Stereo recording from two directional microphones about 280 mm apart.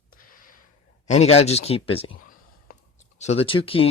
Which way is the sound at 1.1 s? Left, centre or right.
Left.